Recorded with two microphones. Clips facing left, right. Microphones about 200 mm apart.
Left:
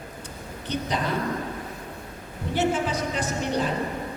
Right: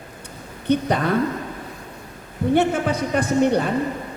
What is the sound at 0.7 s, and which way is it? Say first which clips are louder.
Speech: right 8 dB; 55° right (ahead or behind).